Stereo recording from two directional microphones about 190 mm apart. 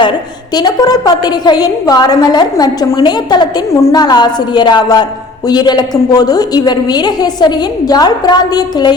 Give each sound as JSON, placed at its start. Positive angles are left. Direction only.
{"t": 0.5, "sound": "a woman's voice", "side_deg": 20}